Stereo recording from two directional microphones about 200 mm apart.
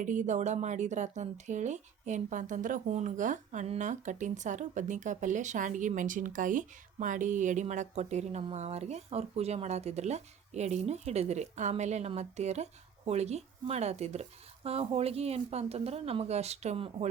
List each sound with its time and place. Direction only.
0.0 s speech: 40° right (ahead or behind)